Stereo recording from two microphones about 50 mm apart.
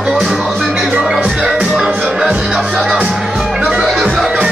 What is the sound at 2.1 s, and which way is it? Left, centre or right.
Music, right.